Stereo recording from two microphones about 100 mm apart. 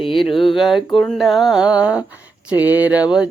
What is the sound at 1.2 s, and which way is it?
Speech, centre (ahead or behind).